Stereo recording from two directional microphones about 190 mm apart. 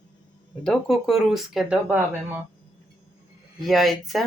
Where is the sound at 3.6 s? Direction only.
Centre (ahead or behind).